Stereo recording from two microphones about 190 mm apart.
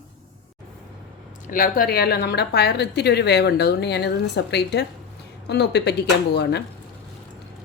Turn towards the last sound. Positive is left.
turn(degrees=60)  # may be behind; listen again after turning